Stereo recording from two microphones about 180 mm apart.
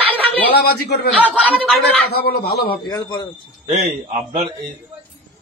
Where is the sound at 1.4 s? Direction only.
10° left (ahead or behind).